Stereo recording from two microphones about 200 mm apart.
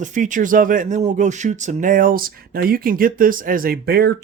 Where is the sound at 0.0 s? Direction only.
40° right (ahead or behind).